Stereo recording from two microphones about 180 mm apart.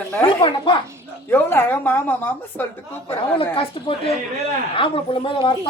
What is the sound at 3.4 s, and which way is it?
A woman's voice, 30° left (ahead or behind).